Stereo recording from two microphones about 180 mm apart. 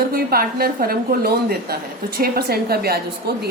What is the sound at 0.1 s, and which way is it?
A woman's voice, 55° right (ahead or behind).